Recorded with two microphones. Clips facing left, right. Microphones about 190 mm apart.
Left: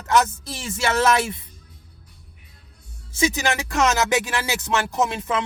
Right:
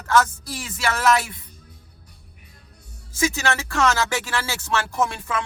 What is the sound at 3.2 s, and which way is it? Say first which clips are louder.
Speech: left 1 dB; 20° left (ahead or behind).